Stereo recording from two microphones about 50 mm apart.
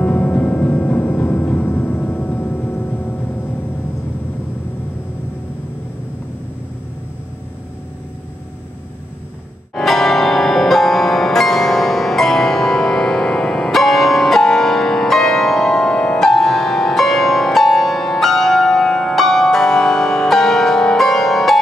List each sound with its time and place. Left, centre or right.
0.0 s music: left
9.8 s music: centre